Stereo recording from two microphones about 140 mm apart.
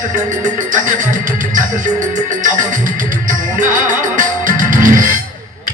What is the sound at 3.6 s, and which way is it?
Music, 65° right (ahead or behind).